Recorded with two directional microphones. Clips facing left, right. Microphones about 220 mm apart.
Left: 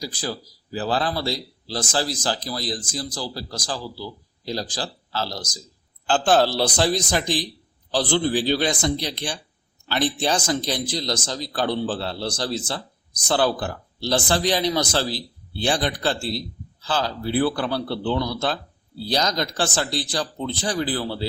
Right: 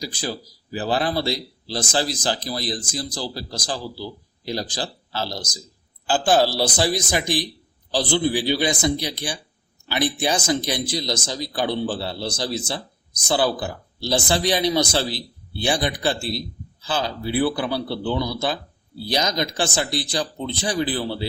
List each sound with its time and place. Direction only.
0.0 s speech: 15° right (ahead or behind)